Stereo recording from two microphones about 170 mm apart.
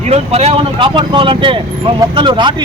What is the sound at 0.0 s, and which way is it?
Speech, 40° right (ahead or behind).